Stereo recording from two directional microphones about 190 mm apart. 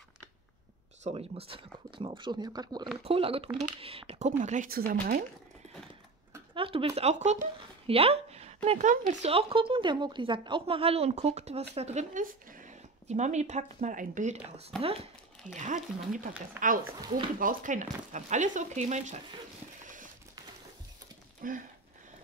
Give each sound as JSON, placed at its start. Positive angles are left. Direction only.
{"t": 1.0, "sound": "a woman's voice", "side_deg": -30}
{"t": 6.5, "sound": "a sound", "side_deg": -30}
{"t": 8.6, "sound": "a woman's voice", "side_deg": -40}
{"t": 9.3, "sound": "a woman's voice", "side_deg": -30}
{"t": 21.4, "sound": "speech", "side_deg": -45}